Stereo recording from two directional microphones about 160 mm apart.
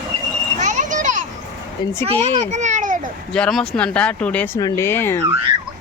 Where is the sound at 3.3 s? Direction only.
5° left (ahead or behind).